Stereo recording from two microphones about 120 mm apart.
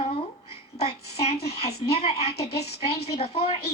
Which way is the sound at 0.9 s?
60° left (ahead or behind).